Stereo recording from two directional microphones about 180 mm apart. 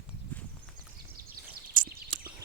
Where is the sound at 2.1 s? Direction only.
30° right (ahead or behind).